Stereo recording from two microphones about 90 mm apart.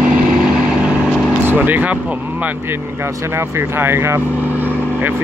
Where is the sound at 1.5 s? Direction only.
20° right (ahead or behind).